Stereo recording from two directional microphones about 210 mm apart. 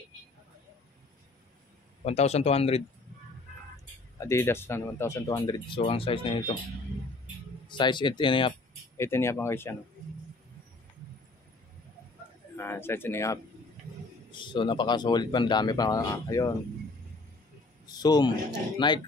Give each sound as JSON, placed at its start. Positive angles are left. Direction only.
{"t": 2.0, "sound": "speech", "side_deg": 30}
{"t": 4.2, "sound": "speech", "side_deg": 10}
{"t": 7.6, "sound": "speech", "side_deg": 20}
{"t": 8.9, "sound": "speech", "side_deg": 10}
{"t": 12.5, "sound": "speech", "side_deg": 10}
{"t": 17.8, "sound": "a man's voice", "side_deg": 20}